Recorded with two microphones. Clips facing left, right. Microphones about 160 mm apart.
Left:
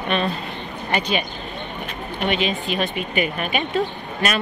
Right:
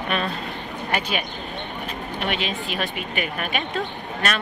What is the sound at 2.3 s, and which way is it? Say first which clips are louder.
Speech: left 7 dB; centre (ahead or behind).